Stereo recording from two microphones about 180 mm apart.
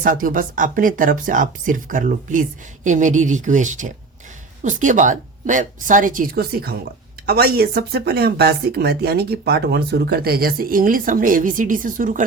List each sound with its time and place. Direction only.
0.0 s speech: 50° right (ahead or behind)